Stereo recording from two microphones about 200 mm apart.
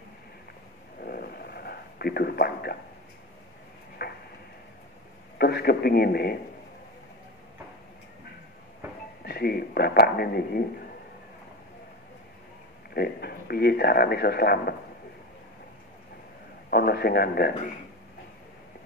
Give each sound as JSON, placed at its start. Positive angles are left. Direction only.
{"t": 1.0, "sound": "a sound", "side_deg": 50}
{"t": 4.0, "sound": "a sound", "side_deg": 50}
{"t": 5.4, "sound": "speech", "side_deg": 50}
{"t": 9.2, "sound": "speech", "side_deg": 50}
{"t": 12.9, "sound": "speech", "side_deg": 50}
{"t": 16.7, "sound": "speech", "side_deg": 55}